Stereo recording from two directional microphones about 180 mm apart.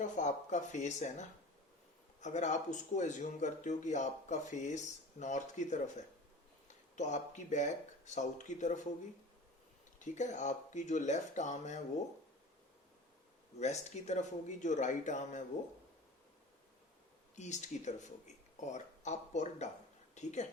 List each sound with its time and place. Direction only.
0.0 s speech: 40° left (ahead or behind)
6.9 s speech: 40° left (ahead or behind)
10.0 s speech: 40° left (ahead or behind)
13.6 s speech: 40° left (ahead or behind)
17.3 s speech: 40° left (ahead or behind)